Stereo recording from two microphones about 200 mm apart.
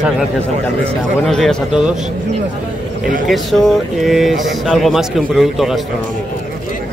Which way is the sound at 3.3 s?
Centre (ahead or behind).